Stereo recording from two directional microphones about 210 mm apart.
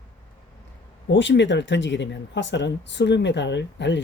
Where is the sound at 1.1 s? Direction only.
60° left (ahead or behind).